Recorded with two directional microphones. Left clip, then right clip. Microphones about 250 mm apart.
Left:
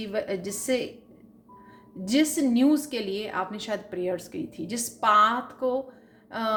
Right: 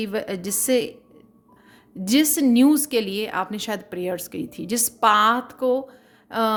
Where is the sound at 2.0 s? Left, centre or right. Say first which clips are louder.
Right 4 dB; right.